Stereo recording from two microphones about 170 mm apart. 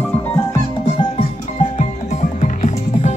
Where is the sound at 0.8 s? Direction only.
35° left (ahead or behind).